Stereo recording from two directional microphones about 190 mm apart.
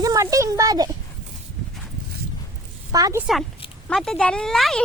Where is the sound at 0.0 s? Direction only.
15° right (ahead or behind).